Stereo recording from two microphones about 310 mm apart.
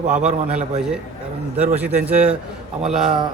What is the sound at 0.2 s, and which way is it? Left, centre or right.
A man's voice, centre.